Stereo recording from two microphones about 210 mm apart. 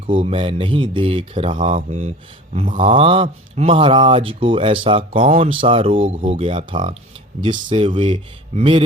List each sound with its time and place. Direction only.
0.1 s speech: 25° right (ahead or behind)